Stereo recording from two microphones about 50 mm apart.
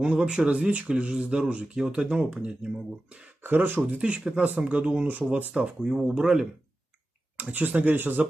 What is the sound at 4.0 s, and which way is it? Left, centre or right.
Speech, right.